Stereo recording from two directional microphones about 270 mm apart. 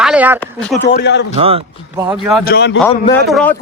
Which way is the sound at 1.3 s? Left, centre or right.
Right.